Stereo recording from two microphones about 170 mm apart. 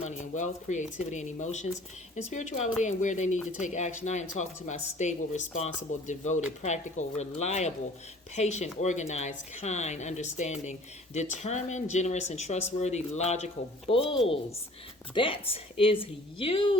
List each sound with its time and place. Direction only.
0.0 s a woman's voice: 45° left (ahead or behind); by 16.7 s 30° left (ahead or behind)